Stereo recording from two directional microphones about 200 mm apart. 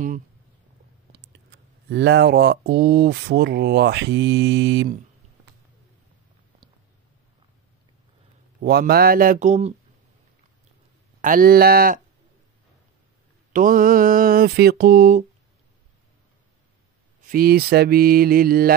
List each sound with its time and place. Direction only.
1.1 s speech: 55° right (ahead or behind)
8.5 s speech: 50° right (ahead or behind); by 9.8 s 35° right (ahead or behind)
11.1 s speech: 45° right (ahead or behind)
13.5 s speech: 45° right (ahead or behind)
17.3 s speech: 50° right (ahead or behind)